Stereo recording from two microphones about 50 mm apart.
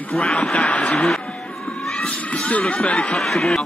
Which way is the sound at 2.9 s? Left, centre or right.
Left.